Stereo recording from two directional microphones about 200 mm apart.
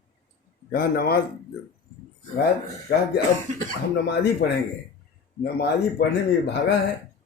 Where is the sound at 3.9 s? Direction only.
55° left (ahead or behind).